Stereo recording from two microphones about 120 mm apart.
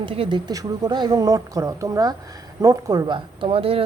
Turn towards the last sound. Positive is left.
turn(degrees=-50)  # may be behind; listen again after turning